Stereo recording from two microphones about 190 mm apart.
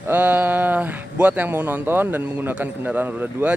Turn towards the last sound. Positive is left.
turn(degrees=-10)  # may be behind; listen again after turning